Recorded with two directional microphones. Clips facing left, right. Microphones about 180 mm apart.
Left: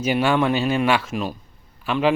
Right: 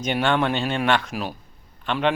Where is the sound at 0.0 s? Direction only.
5° left (ahead or behind).